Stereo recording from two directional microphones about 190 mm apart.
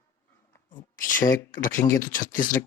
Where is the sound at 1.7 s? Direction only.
15° left (ahead or behind).